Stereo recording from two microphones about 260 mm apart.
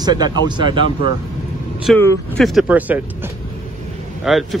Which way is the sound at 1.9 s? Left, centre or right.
Centre.